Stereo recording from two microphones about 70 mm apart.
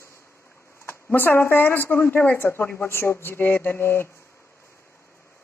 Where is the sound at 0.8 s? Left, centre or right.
Left.